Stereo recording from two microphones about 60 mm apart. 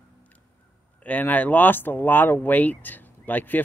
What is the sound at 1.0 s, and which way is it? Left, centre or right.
Speech, left.